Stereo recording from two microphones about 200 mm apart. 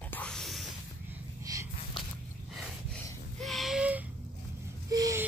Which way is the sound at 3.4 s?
Centre (ahead or behind).